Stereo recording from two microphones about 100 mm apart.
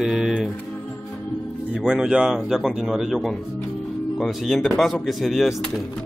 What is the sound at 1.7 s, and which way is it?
Speech, 5° right (ahead or behind).